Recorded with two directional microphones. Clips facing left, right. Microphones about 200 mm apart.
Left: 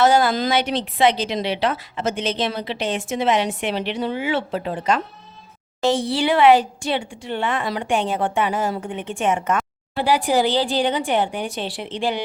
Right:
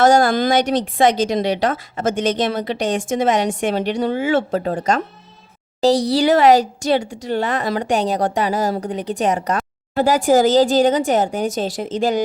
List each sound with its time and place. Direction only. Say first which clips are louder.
0.0 s speech: right 3 dB; 45° right (ahead or behind)